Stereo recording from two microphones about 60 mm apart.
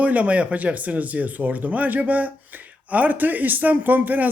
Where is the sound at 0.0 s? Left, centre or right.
Right.